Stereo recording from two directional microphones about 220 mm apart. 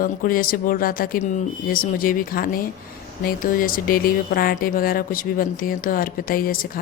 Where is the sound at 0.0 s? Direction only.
40° left (ahead or behind).